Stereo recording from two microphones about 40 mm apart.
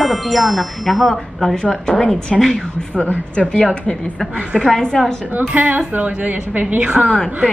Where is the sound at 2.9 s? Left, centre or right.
Left.